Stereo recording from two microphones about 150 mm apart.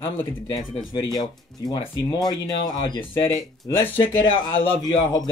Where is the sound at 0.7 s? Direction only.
35° left (ahead or behind).